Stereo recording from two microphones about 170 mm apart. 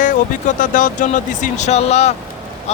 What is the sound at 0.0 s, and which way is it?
Speech, 50° left (ahead or behind).